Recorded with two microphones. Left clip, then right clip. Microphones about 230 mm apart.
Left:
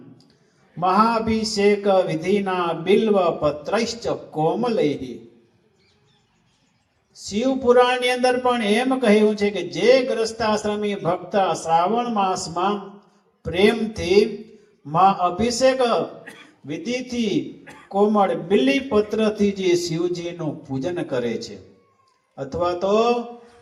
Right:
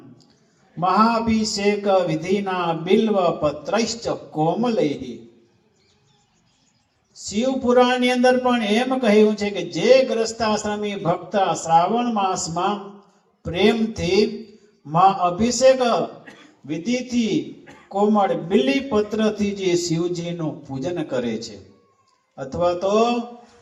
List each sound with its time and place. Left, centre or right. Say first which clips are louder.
0.8 s a man's voice: even; left
7.3 s a man's voice: left 2 dB; left
15.8 s a sound: even; left
17.1 s a man's voice: right 1 dB; left